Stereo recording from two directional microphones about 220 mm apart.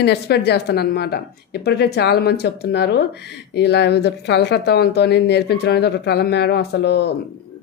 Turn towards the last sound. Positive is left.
turn(degrees=50)  # may be behind; listen again after turning